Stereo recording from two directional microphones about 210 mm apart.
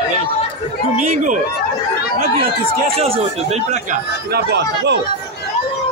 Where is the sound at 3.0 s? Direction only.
30° right (ahead or behind).